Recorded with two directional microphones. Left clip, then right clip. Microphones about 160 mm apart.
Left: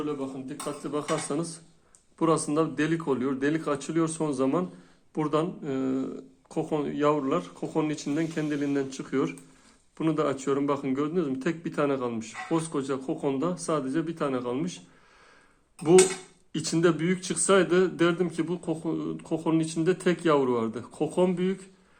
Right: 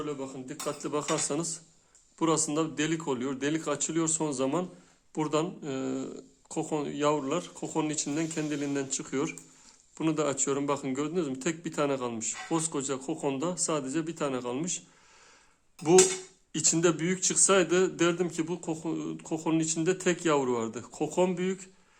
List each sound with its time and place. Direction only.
0.0 s a man's voice: 40° right (ahead or behind)
2.1 s a man's voice: 15° right (ahead or behind)
16.5 s a man's voice: 20° right (ahead or behind)